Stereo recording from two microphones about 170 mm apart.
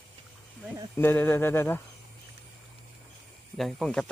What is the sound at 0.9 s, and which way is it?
Speech, 10° left (ahead or behind).